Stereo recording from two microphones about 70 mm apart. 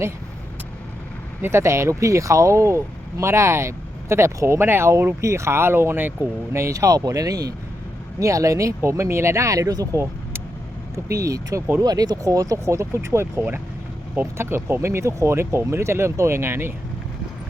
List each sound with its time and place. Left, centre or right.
1.4 s speech: right
6.5 s speech: right
8.2 s speech: right
11.8 s speech: right